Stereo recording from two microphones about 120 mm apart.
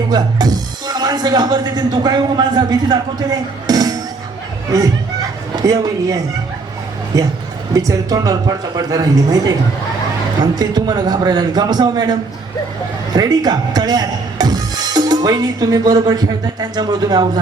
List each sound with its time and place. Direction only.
0.1 s speech: 35° right (ahead or behind)
3.7 s music: 30° right (ahead or behind)
5.5 s speech: 30° right (ahead or behind)
10.4 s speech: 35° right (ahead or behind)
13.1 s speech: 35° right (ahead or behind)